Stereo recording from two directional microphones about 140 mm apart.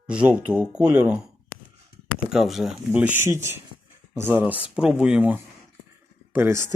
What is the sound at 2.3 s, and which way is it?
Speech, centre (ahead or behind).